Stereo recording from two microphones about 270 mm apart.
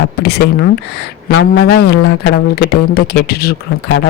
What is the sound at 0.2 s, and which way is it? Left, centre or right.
Speech, left.